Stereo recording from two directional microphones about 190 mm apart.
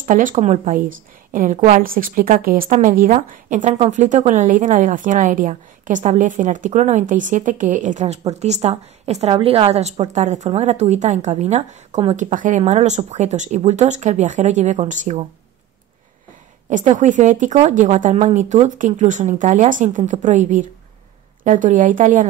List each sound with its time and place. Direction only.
0.0 s a woman's voice: 45° right (ahead or behind)
16.6 s a woman's voice: 40° right (ahead or behind)